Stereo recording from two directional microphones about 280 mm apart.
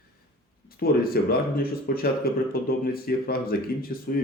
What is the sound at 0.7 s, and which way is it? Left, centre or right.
Speech, left.